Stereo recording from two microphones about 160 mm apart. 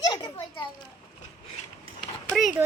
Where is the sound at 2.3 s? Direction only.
5° right (ahead or behind).